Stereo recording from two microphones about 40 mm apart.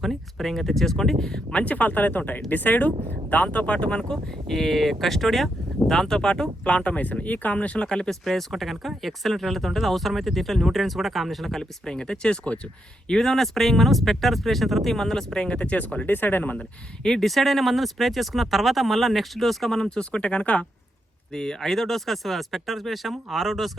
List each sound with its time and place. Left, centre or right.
0.0 s speech: centre
1.5 s speech: left
4.1 s speech: centre
5.9 s speech: centre
6.7 s speech: left
7.9 s speech: centre
8.2 s speech: centre
11.9 s speech: centre
13.1 s speech: centre
15.3 s speech: left
16.0 s speech: left
17.0 s speech: centre
20.0 s speech: left
21.3 s speech: centre